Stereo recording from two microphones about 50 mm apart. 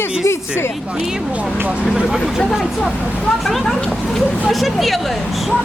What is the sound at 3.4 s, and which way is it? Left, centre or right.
Speech, centre.